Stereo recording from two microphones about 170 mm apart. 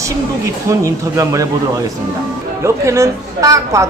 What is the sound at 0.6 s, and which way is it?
Speech, 20° right (ahead or behind).